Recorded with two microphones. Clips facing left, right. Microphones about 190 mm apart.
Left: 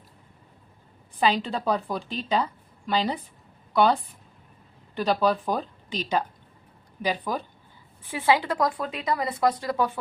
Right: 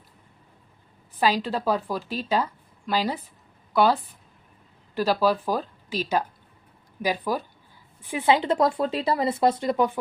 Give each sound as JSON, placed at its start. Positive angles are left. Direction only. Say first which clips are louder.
{"t": 1.2, "sound": "a woman's voice", "louder": "right 1 dB", "side_deg": -5}